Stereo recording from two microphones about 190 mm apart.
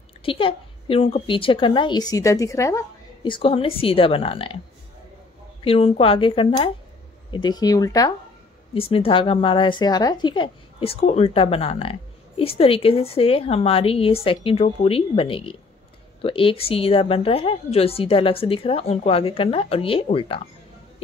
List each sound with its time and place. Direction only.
0.2 s speech: 30° left (ahead or behind)
3.3 s speech: 30° left (ahead or behind)
5.6 s speech: 30° left (ahead or behind)
8.7 s speech: 30° left (ahead or behind)